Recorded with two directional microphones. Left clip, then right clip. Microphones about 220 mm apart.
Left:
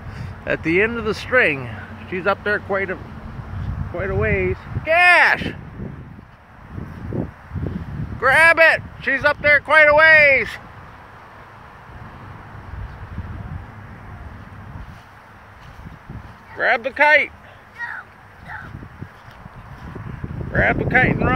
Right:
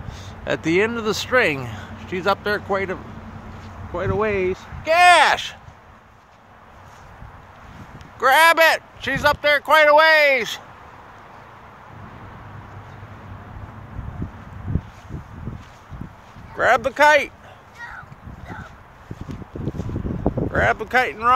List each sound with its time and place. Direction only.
0.7 s speech: 10° right (ahead or behind)
4.0 s speech: 15° right (ahead or behind)
8.2 s speech: 10° right (ahead or behind)
16.5 s speech: 25° right (ahead or behind)
20.5 s speech: 20° right (ahead or behind)